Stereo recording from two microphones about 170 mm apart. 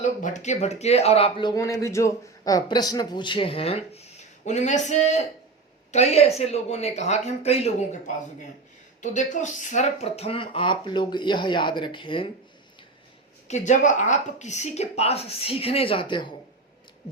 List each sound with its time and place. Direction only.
0.0 s a woman's voice: 45° left (ahead or behind); by 12.3 s 30° left (ahead or behind)
13.5 s a woman's voice: 45° left (ahead or behind); by 16.3 s 30° left (ahead or behind)